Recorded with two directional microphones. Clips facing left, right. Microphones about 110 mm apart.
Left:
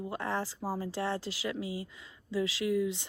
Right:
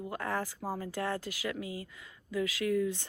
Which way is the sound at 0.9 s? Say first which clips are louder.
Left 1 dB; 25° left (ahead or behind).